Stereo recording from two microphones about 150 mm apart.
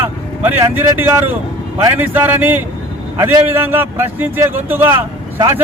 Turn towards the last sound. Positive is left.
turn(degrees=-20)  # may be behind; listen again after turning